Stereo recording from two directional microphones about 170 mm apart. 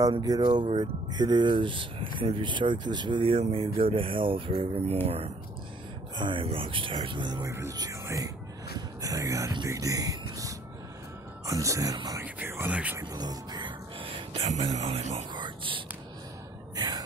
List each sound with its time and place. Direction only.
0.0 s speech: 20° right (ahead or behind)
12.4 s a sound: 10° right (ahead or behind)
13.0 s music: 25° right (ahead or behind); by 15.4 s 40° right (ahead or behind)
15.4 s whispering: 30° right (ahead or behind)